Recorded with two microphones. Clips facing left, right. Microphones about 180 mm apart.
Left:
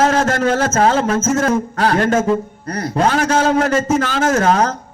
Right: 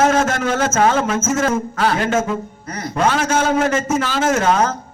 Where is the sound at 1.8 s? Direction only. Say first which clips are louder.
Left 3 dB; 45° left (ahead or behind).